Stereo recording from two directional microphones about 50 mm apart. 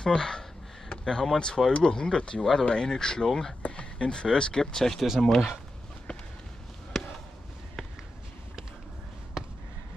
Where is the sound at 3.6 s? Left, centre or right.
Left.